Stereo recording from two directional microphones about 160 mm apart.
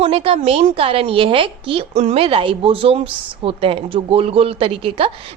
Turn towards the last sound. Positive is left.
turn(degrees=-35)  # may be behind; listen again after turning